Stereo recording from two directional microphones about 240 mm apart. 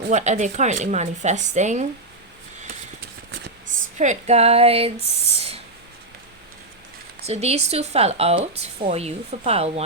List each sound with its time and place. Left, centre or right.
0.1 s speech: right
3.9 s speech: right
7.3 s speech: right